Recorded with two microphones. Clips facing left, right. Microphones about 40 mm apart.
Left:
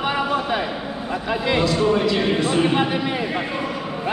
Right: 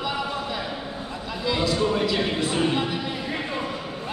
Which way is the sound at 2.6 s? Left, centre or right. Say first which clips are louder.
Left 5 dB; left.